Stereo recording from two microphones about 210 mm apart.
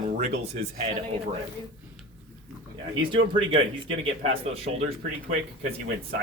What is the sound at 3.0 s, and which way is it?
Speech, 25° right (ahead or behind).